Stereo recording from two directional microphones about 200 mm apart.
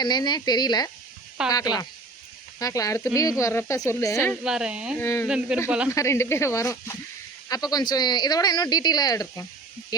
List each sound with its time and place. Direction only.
0.0 s speech: 20° left (ahead or behind)
4.4 s speech: 5° right (ahead or behind)
4.9 s speech: 10° left (ahead or behind)
5.6 s speech: 5° right (ahead or behind)
5.9 s speech: 15° left (ahead or behind)